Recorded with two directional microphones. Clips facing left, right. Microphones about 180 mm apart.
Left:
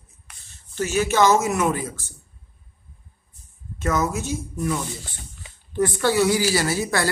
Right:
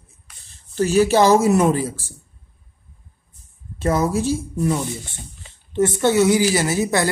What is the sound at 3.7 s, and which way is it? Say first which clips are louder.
Speech: right 4 dB; 30° right (ahead or behind).